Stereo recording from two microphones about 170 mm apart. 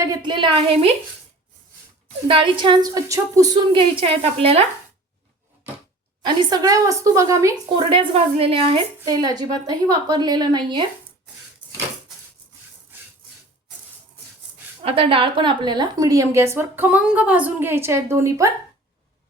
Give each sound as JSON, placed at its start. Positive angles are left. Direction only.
{"t": 0.0, "sound": "a woman's voice", "side_deg": -25}
{"t": 2.2, "sound": "a woman's voice", "side_deg": -30}
{"t": 6.2, "sound": "a woman's voice", "side_deg": -25}
{"t": 7.8, "sound": "a woman's voice", "side_deg": -30}
{"t": 14.8, "sound": "a woman's voice", "side_deg": -30}